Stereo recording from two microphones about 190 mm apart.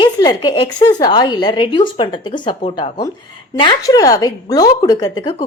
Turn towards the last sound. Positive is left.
turn(degrees=20)  # may be behind; listen again after turning